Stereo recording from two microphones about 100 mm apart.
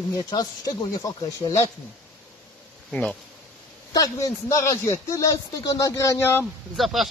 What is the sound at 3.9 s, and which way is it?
Speech, 35° left (ahead or behind).